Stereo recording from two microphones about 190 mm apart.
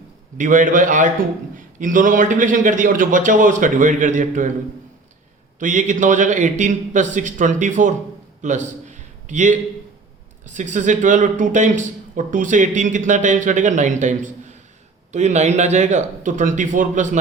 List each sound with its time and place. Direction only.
0.3 s a man's voice: 45° right (ahead or behind)
5.5 s speech: 40° right (ahead or behind)
8.4 s a sound: 40° right (ahead or behind)
10.4 s speech: 40° right (ahead or behind)